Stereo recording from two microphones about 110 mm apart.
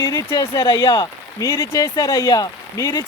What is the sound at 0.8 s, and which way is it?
Speech, 40° left (ahead or behind).